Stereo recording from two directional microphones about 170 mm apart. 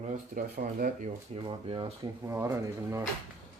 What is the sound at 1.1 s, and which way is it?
Speech, 30° right (ahead or behind).